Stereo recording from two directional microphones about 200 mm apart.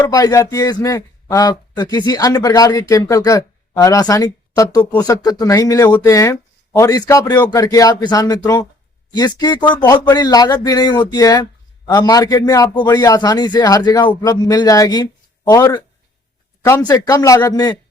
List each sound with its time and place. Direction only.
0.1 s a man's voice: 15° left (ahead or behind)